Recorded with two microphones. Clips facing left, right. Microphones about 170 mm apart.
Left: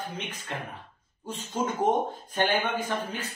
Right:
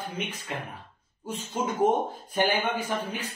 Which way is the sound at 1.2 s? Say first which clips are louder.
Right 1 dB; 10° right (ahead or behind).